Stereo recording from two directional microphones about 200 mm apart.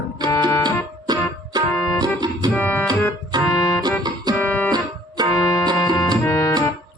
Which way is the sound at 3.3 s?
20° right (ahead or behind).